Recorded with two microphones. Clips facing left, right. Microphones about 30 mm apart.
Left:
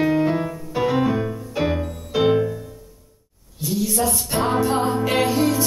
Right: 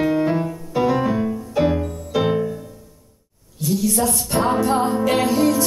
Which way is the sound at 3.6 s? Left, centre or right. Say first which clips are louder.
Right 2 dB; centre.